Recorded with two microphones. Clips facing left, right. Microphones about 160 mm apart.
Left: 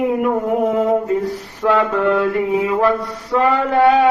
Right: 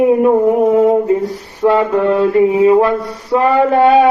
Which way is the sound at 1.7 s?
15° right (ahead or behind).